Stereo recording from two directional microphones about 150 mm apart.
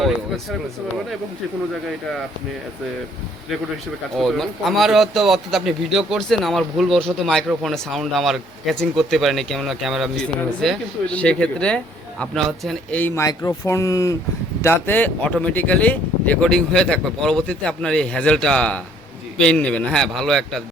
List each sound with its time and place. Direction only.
4.2 s a man's voice: centre (ahead or behind)
13.0 s a man's voice: 15° left (ahead or behind)